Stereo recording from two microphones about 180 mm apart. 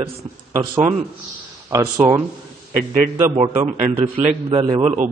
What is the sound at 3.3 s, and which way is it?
A man's voice, 35° right (ahead or behind).